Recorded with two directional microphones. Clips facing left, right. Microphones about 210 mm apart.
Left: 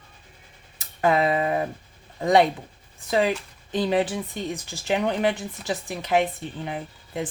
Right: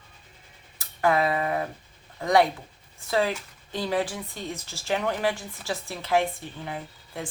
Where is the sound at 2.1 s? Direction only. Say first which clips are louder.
Left 3 dB; 20° left (ahead or behind).